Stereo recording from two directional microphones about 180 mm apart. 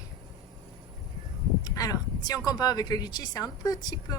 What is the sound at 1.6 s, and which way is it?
Speech, 20° left (ahead or behind).